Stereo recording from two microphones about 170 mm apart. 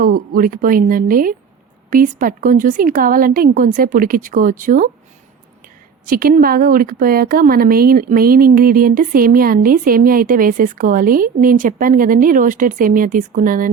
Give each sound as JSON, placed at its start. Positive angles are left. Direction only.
{"t": 0.0, "sound": "a woman's voice", "side_deg": -55}
{"t": 6.1, "sound": "speech", "side_deg": -55}